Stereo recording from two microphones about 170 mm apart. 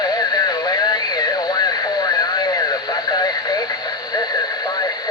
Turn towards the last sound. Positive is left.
turn(degrees=25)  # may be behind; listen again after turning